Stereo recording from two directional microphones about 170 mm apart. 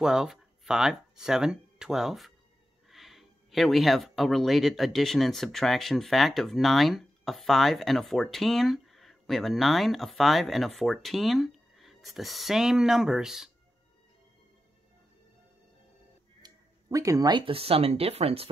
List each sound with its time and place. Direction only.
0.0 s speech: 5° right (ahead or behind)
16.4 s speech: 20° right (ahead or behind); by 18.5 s 35° right (ahead or behind)